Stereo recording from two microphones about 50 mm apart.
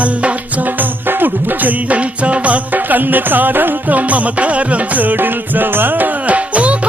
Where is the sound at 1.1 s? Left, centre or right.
Right.